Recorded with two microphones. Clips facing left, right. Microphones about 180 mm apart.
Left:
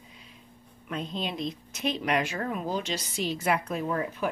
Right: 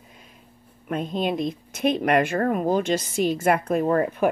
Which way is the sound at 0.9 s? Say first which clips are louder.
Right 8 dB; 50° right (ahead or behind).